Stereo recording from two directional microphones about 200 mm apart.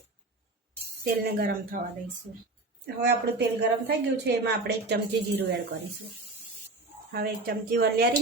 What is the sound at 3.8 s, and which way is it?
A woman's voice, 55° right (ahead or behind).